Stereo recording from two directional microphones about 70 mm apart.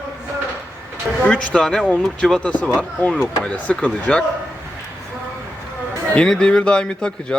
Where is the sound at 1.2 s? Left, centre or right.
Centre.